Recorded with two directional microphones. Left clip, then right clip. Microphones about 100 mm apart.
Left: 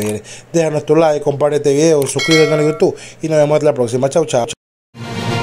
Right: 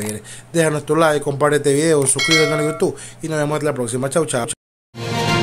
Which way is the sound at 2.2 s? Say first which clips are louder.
Left 5 dB; centre (ahead or behind).